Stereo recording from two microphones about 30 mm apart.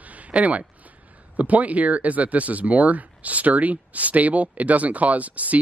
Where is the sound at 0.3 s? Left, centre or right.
Right.